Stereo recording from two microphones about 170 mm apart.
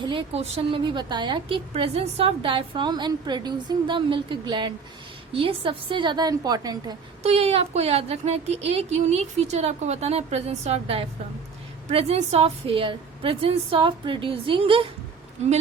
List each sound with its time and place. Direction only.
0.0 s a woman's voice: 30° right (ahead or behind)
7.2 s a woman's voice: 40° right (ahead or behind)